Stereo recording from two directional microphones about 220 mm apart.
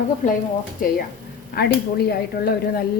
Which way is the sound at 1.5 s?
45° left (ahead or behind).